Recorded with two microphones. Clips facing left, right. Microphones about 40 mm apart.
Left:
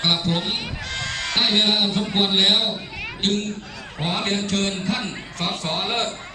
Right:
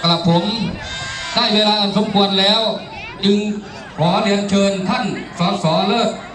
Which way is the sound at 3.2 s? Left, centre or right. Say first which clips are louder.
Right 8 dB; centre.